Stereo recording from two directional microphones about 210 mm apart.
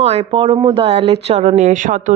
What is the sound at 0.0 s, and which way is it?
Speech, 30° right (ahead or behind).